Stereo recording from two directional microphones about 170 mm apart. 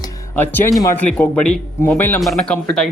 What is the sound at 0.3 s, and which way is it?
Speech, 10° left (ahead or behind).